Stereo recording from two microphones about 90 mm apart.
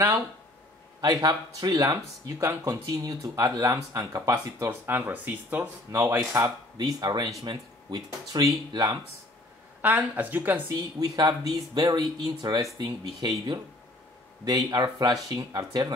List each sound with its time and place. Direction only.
1.2 s speech: 45° right (ahead or behind)
4.6 s speech: 25° right (ahead or behind)
5.9 s speech: 35° right (ahead or behind)
6.8 s speech: 50° right (ahead or behind)
9.8 s speech: 20° right (ahead or behind)
10.7 s speech: 50° right (ahead or behind)